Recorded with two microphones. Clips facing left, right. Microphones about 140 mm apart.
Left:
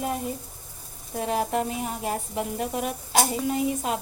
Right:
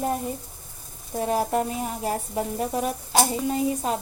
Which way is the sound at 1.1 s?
35° right (ahead or behind).